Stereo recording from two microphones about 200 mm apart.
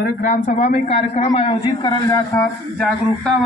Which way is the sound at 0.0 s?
40° left (ahead or behind).